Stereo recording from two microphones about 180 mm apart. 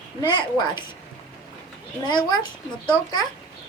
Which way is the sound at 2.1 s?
25° left (ahead or behind).